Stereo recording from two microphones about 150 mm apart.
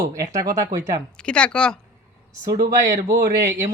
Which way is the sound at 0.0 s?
20° right (ahead or behind).